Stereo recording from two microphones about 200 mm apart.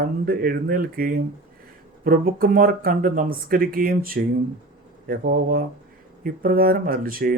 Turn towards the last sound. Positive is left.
turn(degrees=-45)  # may be behind; listen again after turning